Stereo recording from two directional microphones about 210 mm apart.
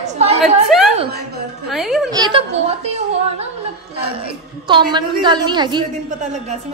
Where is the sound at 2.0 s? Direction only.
20° right (ahead or behind).